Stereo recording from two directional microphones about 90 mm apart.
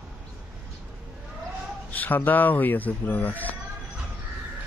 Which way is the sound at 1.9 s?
20° left (ahead or behind).